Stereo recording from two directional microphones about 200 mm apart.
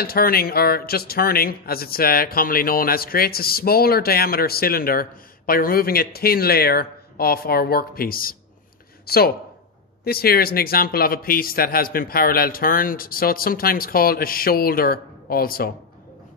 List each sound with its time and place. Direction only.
0.0 s a man's voice: 50° left (ahead or behind)